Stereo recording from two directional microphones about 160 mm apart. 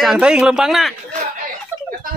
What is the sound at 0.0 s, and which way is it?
Speech, 5° right (ahead or behind).